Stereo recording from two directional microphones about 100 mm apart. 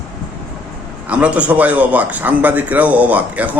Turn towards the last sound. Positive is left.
turn(degrees=-15)  # may be behind; listen again after turning